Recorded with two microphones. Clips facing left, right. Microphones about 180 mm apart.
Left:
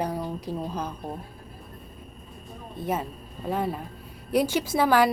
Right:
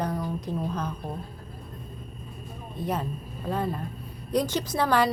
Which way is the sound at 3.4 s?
5° left (ahead or behind).